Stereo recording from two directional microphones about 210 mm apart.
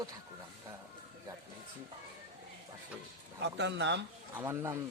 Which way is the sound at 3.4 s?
55° right (ahead or behind).